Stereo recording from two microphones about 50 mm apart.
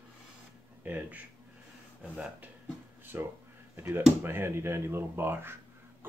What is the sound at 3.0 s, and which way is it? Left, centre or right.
Speech, right.